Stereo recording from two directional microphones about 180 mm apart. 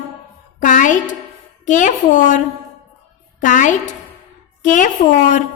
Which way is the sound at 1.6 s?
45° left (ahead or behind).